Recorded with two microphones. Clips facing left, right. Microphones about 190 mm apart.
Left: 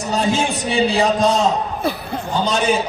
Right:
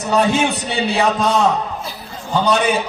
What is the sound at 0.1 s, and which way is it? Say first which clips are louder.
A man's voice: right 3 dB; 65° right (ahead or behind).